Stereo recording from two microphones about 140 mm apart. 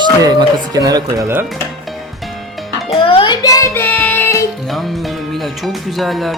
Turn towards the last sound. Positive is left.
turn(degrees=0)  # may be behind; listen again after turning